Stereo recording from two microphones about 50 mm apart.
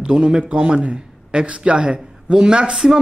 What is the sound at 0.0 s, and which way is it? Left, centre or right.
A man's voice, centre.